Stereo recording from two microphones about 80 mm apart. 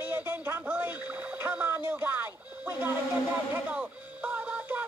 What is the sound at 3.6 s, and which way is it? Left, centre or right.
Music, centre.